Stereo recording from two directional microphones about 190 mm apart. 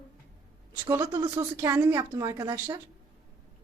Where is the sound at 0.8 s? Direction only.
15° right (ahead or behind).